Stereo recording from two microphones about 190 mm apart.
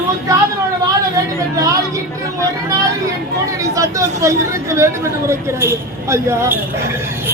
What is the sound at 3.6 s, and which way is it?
Speech, 15° right (ahead or behind).